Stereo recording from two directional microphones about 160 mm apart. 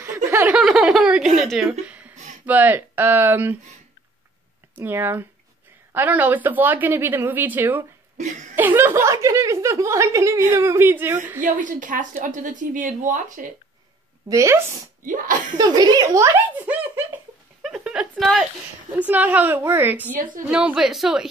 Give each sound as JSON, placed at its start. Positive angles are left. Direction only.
{"t": 0.0, "sound": "a sound", "side_deg": -15}
{"t": 0.6, "sound": "snicker", "side_deg": -5}
{"t": 1.4, "sound": "a woman's voice", "side_deg": 0}
{"t": 4.7, "sound": "speech", "side_deg": -15}
{"t": 8.2, "sound": "speech", "side_deg": -50}
{"t": 8.5, "sound": "speech", "side_deg": -15}
{"t": 11.4, "sound": "a woman's voice", "side_deg": -55}
{"t": 14.3, "sound": "speech", "side_deg": -20}
{"t": 15.5, "sound": "a sound", "side_deg": -25}
{"t": 18.1, "sound": "speech", "side_deg": 0}
{"t": 18.9, "sound": "a woman's voice", "side_deg": -10}